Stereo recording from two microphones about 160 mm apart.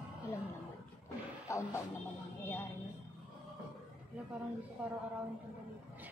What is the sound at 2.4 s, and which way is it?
Music, 15° left (ahead or behind).